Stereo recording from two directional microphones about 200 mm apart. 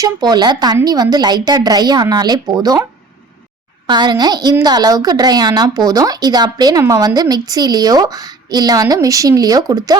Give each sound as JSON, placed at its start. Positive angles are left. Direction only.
{"t": 0.0, "sound": "speech", "side_deg": -20}
{"t": 3.8, "sound": "speech", "side_deg": -20}